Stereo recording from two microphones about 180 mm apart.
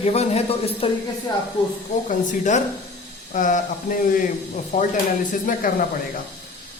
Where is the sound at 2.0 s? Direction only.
45° left (ahead or behind).